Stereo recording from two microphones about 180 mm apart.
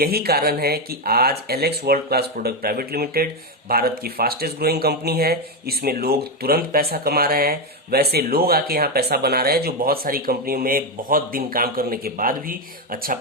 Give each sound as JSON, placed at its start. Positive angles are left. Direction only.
{"t": 0.0, "sound": "speech", "side_deg": -60}